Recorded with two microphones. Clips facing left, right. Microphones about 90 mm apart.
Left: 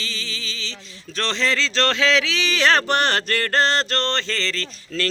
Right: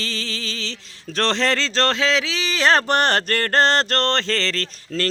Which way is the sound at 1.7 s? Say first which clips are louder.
Left 2 dB; 30° right (ahead or behind).